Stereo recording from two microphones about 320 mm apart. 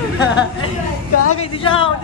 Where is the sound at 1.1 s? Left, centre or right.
Left.